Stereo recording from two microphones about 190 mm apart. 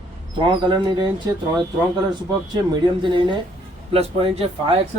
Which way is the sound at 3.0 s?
25° right (ahead or behind).